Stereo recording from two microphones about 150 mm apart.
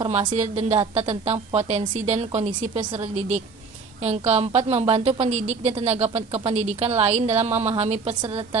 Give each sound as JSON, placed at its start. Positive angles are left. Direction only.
{"t": 0.4, "sound": "a woman's voice", "side_deg": -45}